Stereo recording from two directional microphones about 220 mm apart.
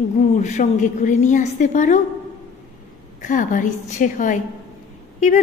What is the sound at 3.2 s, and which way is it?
A woman's voice, 35° left (ahead or behind).